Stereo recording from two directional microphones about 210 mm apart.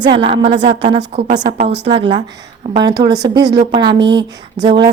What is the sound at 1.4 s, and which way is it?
Speech, 55° right (ahead or behind).